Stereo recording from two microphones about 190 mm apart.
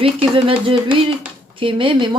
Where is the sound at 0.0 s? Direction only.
30° right (ahead or behind).